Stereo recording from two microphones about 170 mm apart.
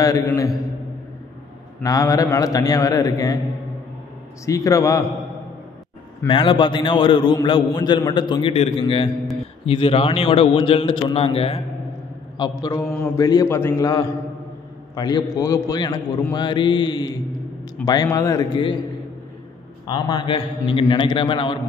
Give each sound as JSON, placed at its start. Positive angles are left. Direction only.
{"t": 1.8, "sound": "a man's voice", "side_deg": 20}
{"t": 4.5, "sound": "a man's voice", "side_deg": 20}
{"t": 6.2, "sound": "a man's voice", "side_deg": 30}
{"t": 12.4, "sound": "a man's voice", "side_deg": 20}
{"t": 19.9, "sound": "a man's voice", "side_deg": 25}